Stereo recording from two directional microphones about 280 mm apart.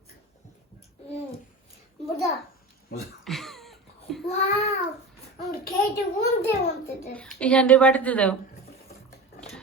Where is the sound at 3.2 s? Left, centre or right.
Centre.